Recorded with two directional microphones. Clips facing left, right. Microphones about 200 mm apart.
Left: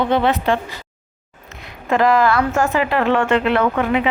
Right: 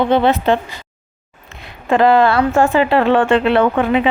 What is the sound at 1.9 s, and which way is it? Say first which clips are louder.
Speech: right 3 dB; 30° right (ahead or behind).